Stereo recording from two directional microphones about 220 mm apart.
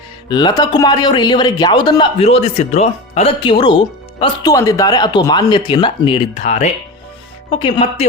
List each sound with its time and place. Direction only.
0.3 s speech: 20° left (ahead or behind)